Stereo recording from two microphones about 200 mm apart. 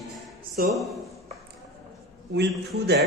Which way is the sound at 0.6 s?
45° right (ahead or behind).